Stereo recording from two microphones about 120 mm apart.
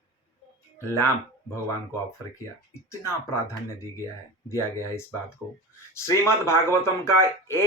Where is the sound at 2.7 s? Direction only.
25° left (ahead or behind).